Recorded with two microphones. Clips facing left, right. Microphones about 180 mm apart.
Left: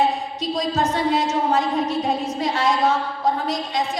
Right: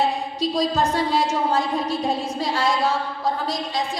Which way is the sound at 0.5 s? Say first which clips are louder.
Even; 35° right (ahead or behind).